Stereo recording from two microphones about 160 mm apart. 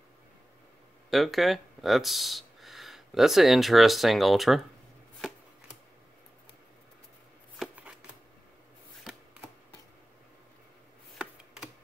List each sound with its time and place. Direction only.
1.1 s speech: centre (ahead or behind)
7.5 s shuffling cards: 5° right (ahead or behind)